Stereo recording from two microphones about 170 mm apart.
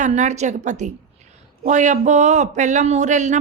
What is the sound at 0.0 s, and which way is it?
Speech, 45° right (ahead or behind).